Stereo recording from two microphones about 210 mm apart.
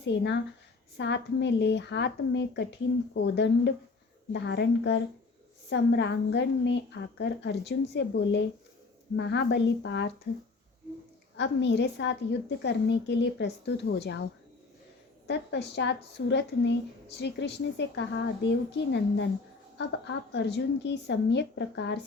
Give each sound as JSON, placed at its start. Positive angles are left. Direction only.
{"t": 0.0, "sound": "a woman's voice", "side_deg": 55}
{"t": 11.3, "sound": "a woman's voice", "side_deg": 55}
{"t": 15.3, "sound": "a woman's voice", "side_deg": 55}
{"t": 20.3, "sound": "a woman's voice", "side_deg": 55}